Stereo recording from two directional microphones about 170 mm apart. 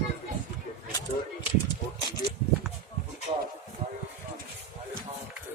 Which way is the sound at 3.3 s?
35° right (ahead or behind).